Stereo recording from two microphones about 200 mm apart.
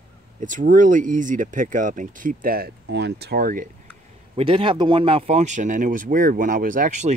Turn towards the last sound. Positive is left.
turn(degrees=-40)  # may be behind; listen again after turning